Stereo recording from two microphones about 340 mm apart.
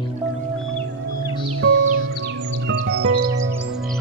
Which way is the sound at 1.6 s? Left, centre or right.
Right.